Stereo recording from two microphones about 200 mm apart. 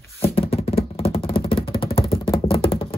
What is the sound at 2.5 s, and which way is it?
Music, 25° left (ahead or behind).